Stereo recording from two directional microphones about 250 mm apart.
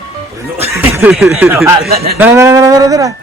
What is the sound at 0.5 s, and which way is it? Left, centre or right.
Speech, centre.